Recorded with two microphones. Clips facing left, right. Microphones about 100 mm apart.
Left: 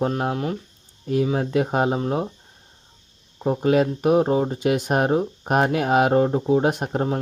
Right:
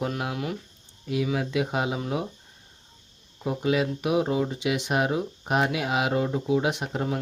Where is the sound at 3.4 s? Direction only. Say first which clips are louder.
Left 6 dB; 40° left (ahead or behind).